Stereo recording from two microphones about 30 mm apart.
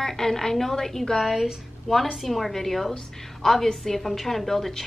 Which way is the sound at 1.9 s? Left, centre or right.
Centre.